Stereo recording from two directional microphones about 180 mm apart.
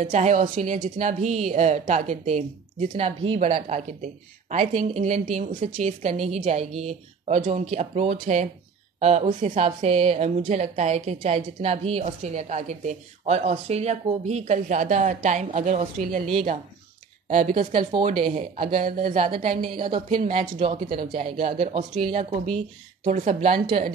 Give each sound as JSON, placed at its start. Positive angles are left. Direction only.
{"t": 0.0, "sound": "a woman's voice", "side_deg": -40}
{"t": 17.3, "sound": "a woman's voice", "side_deg": -40}
{"t": 18.2, "sound": "a woman's voice", "side_deg": -30}
{"t": 18.7, "sound": "a woman's voice", "side_deg": -50}
{"t": 20.5, "sound": "a woman's voice", "side_deg": -35}